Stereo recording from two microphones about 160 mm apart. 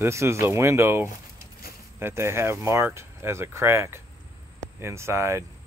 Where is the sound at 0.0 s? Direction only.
15° right (ahead or behind).